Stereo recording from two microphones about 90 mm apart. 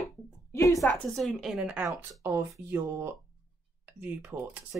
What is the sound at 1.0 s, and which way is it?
Speech, centre (ahead or behind).